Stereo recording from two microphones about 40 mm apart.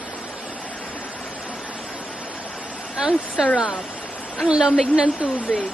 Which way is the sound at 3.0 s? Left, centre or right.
Centre.